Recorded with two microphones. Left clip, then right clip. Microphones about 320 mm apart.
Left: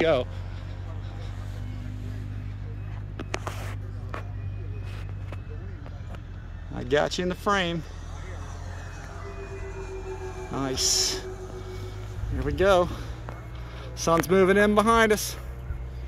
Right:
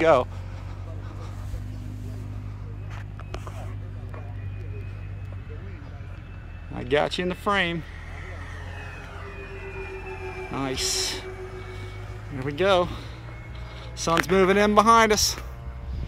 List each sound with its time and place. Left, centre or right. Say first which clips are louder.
0.0 s speech: right 4 dB; centre
6.7 s speech: right 1 dB; centre
9.8 s music: right 1 dB; centre
12.4 s speech: even; centre